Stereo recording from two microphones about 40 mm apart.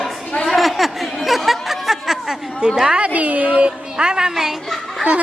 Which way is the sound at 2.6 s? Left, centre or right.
Right.